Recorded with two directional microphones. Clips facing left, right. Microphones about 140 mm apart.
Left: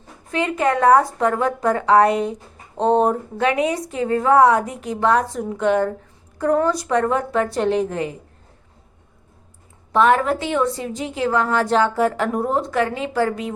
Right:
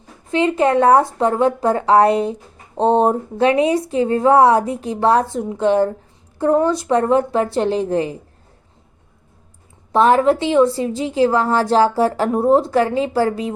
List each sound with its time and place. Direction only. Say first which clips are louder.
0.3 s a woman's voice: right 4 dB; 25° right (ahead or behind)
9.9 s a woman's voice: right 3 dB; 30° right (ahead or behind)